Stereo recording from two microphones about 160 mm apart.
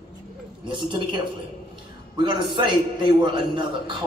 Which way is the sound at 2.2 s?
30° right (ahead or behind).